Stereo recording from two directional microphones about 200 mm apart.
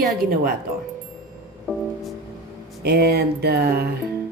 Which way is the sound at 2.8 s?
50° right (ahead or behind).